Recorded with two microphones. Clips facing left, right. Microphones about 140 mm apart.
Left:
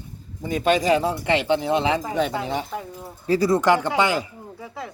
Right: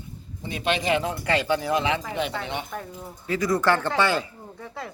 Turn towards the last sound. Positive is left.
turn(degrees=0)  # may be behind; listen again after turning